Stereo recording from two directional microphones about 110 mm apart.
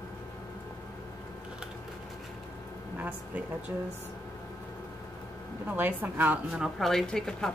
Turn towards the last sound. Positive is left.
turn(degrees=5)  # may be behind; listen again after turning